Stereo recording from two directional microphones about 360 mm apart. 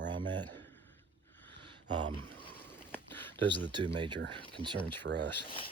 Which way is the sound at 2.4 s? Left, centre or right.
Centre.